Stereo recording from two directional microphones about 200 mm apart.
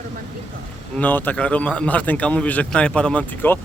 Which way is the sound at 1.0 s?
10° left (ahead or behind).